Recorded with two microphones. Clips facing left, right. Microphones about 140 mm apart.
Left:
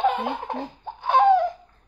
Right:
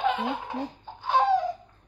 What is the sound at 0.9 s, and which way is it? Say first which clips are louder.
Baby laughter: left 6 dB; 60° left (ahead or behind).